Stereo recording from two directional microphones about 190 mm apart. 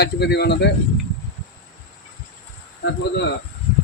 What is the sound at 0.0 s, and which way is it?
Speech, 60° left (ahead or behind).